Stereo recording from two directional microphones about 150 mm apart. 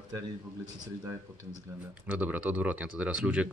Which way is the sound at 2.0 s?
10° right (ahead or behind).